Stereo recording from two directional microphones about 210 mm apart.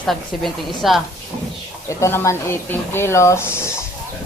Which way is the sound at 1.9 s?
15° left (ahead or behind).